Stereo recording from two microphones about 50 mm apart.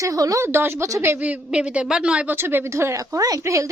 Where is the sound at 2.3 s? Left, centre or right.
Right.